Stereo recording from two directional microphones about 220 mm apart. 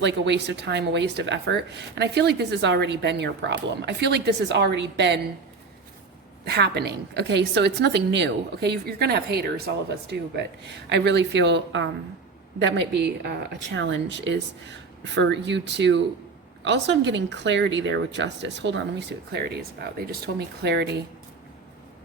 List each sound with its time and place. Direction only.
0.0 s speech: 50° right (ahead or behind)
6.4 s speech: 45° right (ahead or behind)
10.8 s speech: 50° right (ahead or behind)